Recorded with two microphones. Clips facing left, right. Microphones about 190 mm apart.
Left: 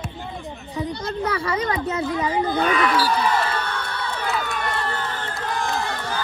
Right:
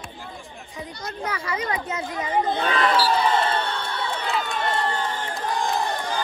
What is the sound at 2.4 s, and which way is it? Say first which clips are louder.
Crowd: left 2 dB; 25° right (ahead or behind).